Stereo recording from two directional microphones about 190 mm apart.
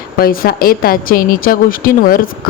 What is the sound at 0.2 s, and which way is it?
A woman's voice, 50° left (ahead or behind).